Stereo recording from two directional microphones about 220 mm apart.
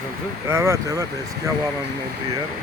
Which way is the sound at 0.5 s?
15° right (ahead or behind).